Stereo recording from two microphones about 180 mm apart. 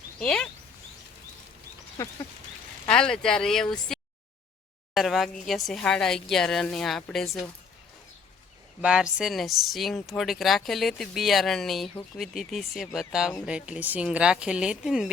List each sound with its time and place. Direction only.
0.2 s speech: 5° left (ahead or behind)
2.0 s a sound: 15° left (ahead or behind)
2.8 s speech: 5° left (ahead or behind)
8.8 s speech: 5° right (ahead or behind)